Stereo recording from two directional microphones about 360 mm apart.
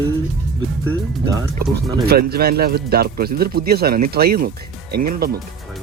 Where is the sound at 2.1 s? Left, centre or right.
Right.